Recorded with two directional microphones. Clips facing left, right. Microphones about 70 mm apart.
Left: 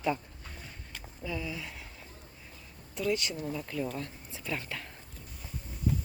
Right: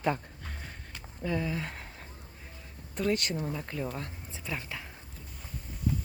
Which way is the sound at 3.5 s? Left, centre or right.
Right.